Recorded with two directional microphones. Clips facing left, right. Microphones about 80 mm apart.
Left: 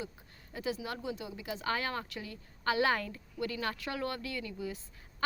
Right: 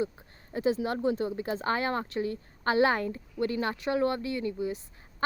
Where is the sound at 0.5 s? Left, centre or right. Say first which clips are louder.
Right 9 dB; right.